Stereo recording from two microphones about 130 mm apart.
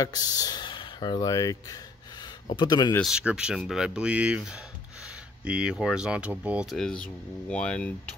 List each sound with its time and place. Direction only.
0.0 s speech: 30° left (ahead or behind)
3.0 s speech: 5° right (ahead or behind)
6.7 s speech: 5° left (ahead or behind)